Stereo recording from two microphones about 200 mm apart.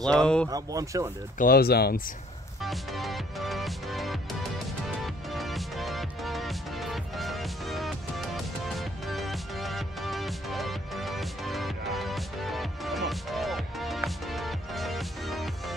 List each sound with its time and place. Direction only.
0.0 s speech: 5° left (ahead or behind)
0.5 s speech: 15° right (ahead or behind)
1.4 s speech: 50° left (ahead or behind)
2.6 s music: centre (ahead or behind)